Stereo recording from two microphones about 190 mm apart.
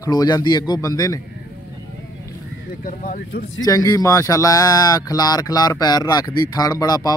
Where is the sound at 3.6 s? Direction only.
20° left (ahead or behind).